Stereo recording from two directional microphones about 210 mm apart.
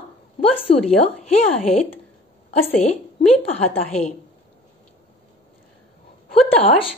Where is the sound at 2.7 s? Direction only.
30° left (ahead or behind).